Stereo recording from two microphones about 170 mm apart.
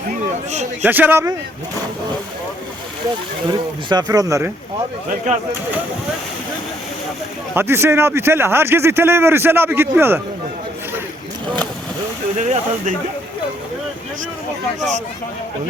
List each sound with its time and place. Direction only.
0.8 s speech: 10° right (ahead or behind)
3.8 s speech: 25° right (ahead or behind)
7.5 s speech: 15° right (ahead or behind)
12.4 s speech: 45° right (ahead or behind)